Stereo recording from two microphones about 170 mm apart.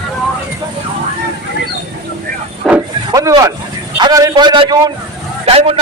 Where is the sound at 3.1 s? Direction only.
20° right (ahead or behind).